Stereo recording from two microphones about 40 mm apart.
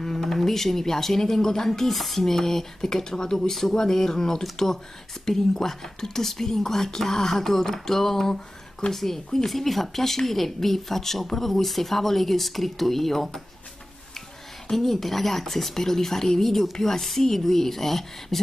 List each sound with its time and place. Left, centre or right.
0.0 s speech: centre
14.7 s speech: centre